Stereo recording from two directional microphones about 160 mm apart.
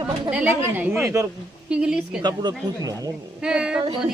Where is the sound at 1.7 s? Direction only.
5° right (ahead or behind).